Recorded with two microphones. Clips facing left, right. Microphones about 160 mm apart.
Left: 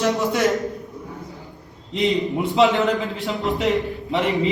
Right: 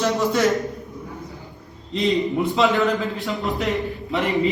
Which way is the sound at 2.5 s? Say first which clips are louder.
Left 3 dB; 20° left (ahead or behind).